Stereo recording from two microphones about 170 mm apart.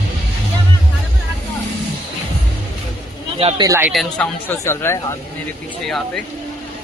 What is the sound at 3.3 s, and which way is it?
Speech, 35° right (ahead or behind).